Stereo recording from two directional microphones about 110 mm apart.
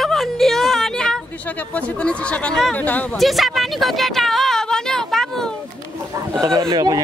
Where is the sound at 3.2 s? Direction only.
Centre (ahead or behind).